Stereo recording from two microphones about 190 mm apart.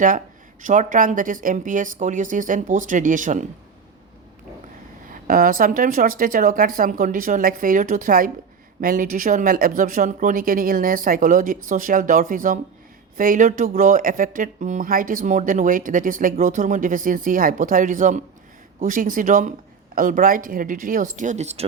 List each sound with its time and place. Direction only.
0.6 s speech: 40° right (ahead or behind)
5.1 s speech: 45° right (ahead or behind)